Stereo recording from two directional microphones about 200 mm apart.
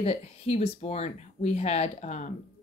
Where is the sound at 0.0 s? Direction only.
30° left (ahead or behind).